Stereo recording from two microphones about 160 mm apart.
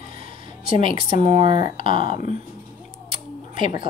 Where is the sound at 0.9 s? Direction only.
30° right (ahead or behind).